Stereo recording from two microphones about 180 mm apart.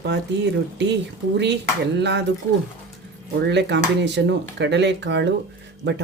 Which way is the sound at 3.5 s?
75° right (ahead or behind).